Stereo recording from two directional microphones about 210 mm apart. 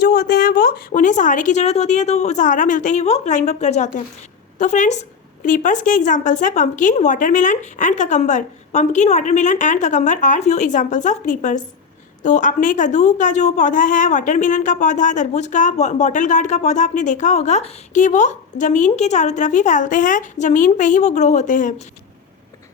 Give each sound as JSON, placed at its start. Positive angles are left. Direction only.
{"t": 0.0, "sound": "a woman's voice", "side_deg": 50}